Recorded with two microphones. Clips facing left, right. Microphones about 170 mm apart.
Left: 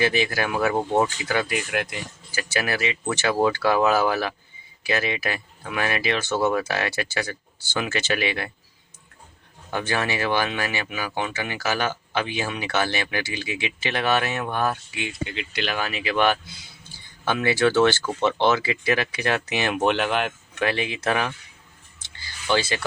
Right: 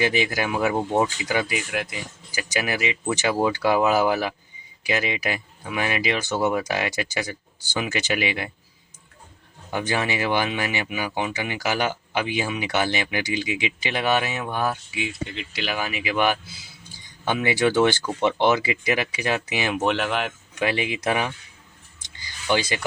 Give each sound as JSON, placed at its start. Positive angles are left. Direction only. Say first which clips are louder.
{"t": 0.0, "sound": "speech", "louder": "even", "side_deg": -15}
{"t": 1.5, "sound": "speech", "louder": "left 1 dB", "side_deg": -5}
{"t": 9.7, "sound": "speech", "louder": "right 1 dB", "side_deg": -15}
{"t": 20.6, "sound": "speech", "louder": "right 1 dB", "side_deg": -15}
{"t": 22.0, "sound": "a sound", "louder": "right 1 dB", "side_deg": -15}